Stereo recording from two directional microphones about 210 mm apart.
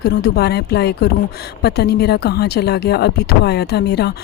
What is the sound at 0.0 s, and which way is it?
Speech, 50° left (ahead or behind).